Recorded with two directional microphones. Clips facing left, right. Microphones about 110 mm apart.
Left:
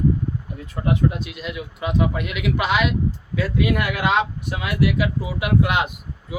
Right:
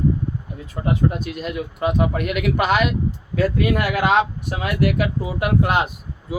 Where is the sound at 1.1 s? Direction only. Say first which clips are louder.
Right 4 dB; 45° right (ahead or behind).